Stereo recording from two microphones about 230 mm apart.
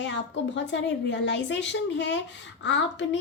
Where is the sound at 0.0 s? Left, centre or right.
Left.